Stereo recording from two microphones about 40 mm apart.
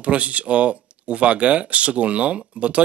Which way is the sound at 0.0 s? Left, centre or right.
Right.